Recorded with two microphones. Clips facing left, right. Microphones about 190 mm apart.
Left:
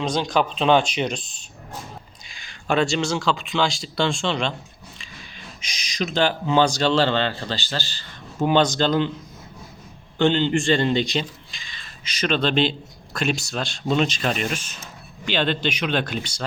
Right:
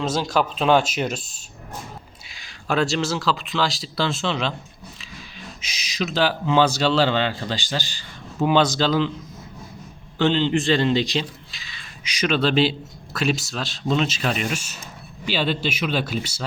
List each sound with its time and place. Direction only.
0.0 s speech: 5° right (ahead or behind)
5.6 s speech: 5° right (ahead or behind)
10.2 s a man's voice: centre (ahead or behind)